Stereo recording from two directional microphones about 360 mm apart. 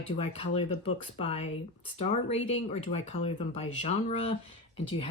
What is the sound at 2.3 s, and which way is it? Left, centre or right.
Speech, left.